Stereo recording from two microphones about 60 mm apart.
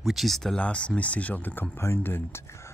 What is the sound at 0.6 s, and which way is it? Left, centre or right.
Speech, centre.